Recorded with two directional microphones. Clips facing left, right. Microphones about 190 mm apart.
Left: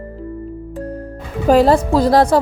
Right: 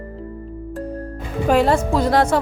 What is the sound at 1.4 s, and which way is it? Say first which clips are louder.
Speech: left 5 dB; 35° left (ahead or behind).